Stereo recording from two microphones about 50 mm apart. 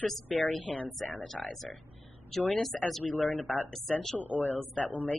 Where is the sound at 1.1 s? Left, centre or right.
Centre.